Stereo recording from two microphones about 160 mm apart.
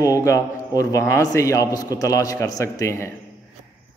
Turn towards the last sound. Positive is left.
turn(degrees=15)  # may be behind; listen again after turning